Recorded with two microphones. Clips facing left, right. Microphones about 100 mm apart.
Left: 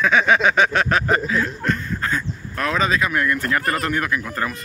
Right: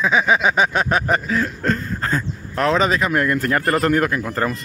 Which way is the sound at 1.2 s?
35° right (ahead or behind).